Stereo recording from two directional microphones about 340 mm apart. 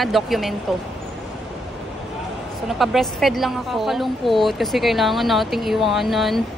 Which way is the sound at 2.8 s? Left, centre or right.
Centre.